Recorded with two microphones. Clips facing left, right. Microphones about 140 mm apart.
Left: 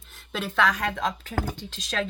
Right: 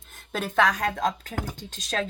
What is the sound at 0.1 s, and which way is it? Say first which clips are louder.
Speech: right 1 dB; 45° right (ahead or behind).